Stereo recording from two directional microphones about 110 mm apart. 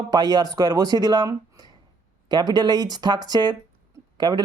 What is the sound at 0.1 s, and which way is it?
Speech, 40° right (ahead or behind).